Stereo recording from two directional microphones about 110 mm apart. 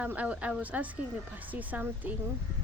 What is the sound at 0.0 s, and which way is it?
Speech, 15° right (ahead or behind).